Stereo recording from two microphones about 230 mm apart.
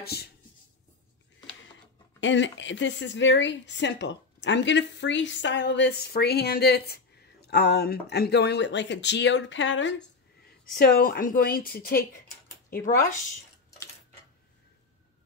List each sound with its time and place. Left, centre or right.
0.0 s speech: left
2.1 s a woman's voice: left
10.7 s a woman's voice: left